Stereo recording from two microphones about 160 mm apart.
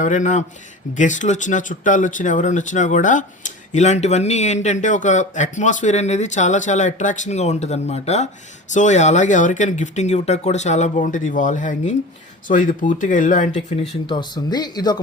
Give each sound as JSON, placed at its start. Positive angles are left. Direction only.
{"t": 0.0, "sound": "speech", "side_deg": 50}
{"t": 14.1, "sound": "speech", "side_deg": 30}